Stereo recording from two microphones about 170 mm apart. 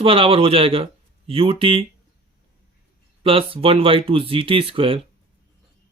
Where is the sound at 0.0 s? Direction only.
35° right (ahead or behind).